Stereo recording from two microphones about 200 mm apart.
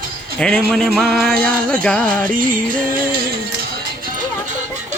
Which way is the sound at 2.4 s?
45° right (ahead or behind).